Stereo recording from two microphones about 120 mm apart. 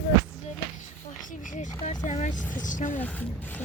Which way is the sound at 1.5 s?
75° left (ahead or behind).